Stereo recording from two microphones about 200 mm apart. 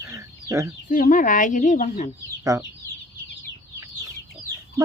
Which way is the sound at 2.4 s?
15° right (ahead or behind).